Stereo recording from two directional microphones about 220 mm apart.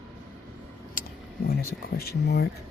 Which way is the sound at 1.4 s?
45° left (ahead or behind).